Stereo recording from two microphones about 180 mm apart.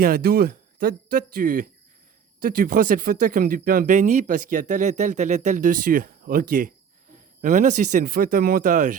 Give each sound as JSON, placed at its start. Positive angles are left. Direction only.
{"t": 0.0, "sound": "speech", "side_deg": -55}